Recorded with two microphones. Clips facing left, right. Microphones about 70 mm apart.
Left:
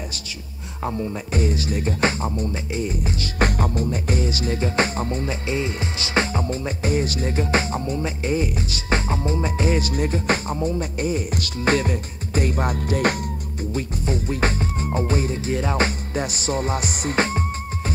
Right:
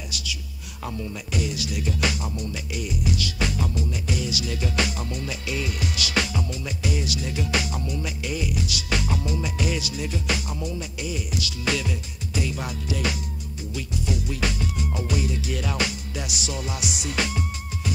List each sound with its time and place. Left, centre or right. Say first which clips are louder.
0.8 s speech: left 6 dB; left
13.7 s music: left 3 dB; left